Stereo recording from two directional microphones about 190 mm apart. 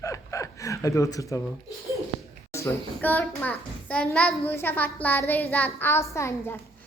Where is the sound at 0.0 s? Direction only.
15° left (ahead or behind).